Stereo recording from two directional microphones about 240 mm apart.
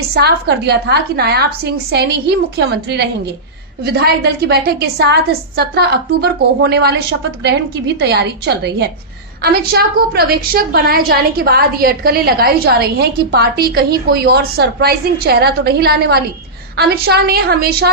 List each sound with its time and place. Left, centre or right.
0.1 s a woman's voice: right
7.9 s a woman's voice: right